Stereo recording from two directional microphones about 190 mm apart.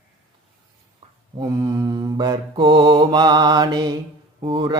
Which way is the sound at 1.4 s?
20° right (ahead or behind).